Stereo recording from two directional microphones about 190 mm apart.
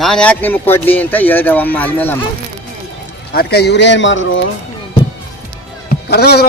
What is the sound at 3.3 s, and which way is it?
Speech, 55° left (ahead or behind).